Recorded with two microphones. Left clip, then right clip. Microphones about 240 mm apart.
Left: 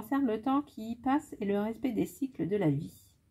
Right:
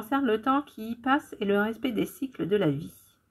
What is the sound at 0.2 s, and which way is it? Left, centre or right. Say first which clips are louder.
Speech: right 5 dB; left.